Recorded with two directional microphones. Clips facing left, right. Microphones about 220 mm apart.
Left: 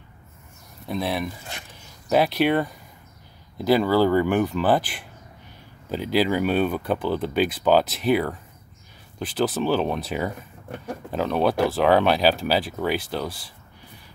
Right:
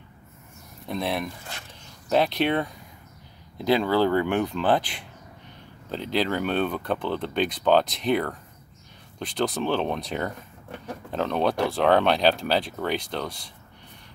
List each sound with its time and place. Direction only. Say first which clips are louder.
0.8 s speech: left 2 dB; centre (ahead or behind)